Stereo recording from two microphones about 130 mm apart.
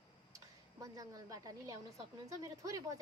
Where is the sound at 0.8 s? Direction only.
30° right (ahead or behind).